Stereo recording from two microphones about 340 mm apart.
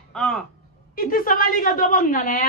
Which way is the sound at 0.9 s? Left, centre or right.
Left.